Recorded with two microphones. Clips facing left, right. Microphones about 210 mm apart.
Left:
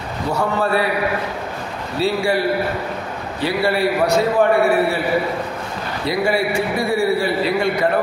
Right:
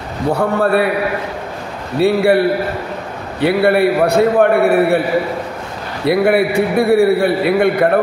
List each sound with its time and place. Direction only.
0.3 s a man's voice: 55° right (ahead or behind)
2.0 s a man's voice: 60° right (ahead or behind)
6.0 s a man's voice: 60° right (ahead or behind)